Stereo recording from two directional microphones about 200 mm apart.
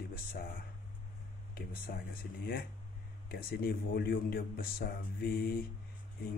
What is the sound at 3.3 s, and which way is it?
Speech, 50° left (ahead or behind).